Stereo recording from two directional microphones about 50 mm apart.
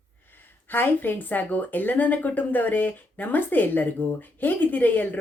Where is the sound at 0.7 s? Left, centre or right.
Left.